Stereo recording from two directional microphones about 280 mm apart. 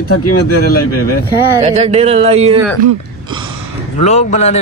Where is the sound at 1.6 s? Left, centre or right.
Right.